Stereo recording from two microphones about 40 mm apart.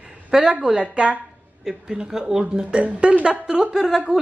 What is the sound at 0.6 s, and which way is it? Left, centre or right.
Speech, right.